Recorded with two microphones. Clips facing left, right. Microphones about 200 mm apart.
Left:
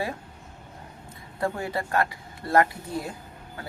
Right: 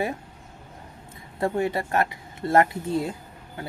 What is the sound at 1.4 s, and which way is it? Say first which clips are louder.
Speech: right 4 dB; 25° right (ahead or behind).